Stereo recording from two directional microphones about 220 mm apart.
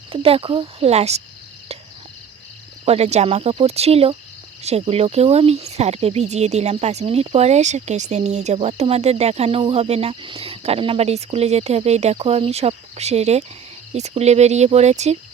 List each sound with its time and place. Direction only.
0.1 s speech: 25° right (ahead or behind)
2.8 s speech: 30° right (ahead or behind)